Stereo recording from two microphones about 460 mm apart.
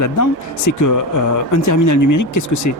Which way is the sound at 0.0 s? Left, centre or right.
Left.